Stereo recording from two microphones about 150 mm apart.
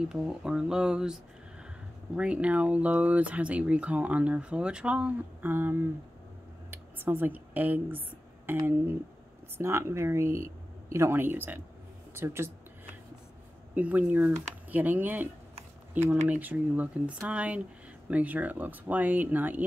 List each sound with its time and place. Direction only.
0.1 s speech: 5° right (ahead or behind)
13.7 s speech: 10° right (ahead or behind)